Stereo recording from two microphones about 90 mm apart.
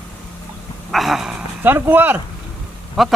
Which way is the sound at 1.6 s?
20° right (ahead or behind).